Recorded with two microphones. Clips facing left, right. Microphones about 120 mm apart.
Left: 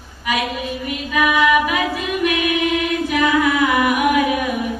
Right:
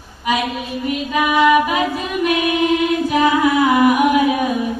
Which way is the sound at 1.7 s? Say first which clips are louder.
Right 1 dB; 25° right (ahead or behind).